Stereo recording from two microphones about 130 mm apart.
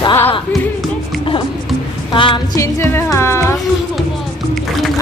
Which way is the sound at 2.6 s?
20° left (ahead or behind).